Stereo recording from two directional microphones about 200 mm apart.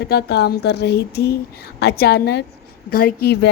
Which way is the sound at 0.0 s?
55° left (ahead or behind).